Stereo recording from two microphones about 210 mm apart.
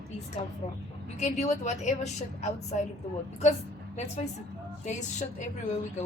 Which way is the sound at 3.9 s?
30° left (ahead or behind).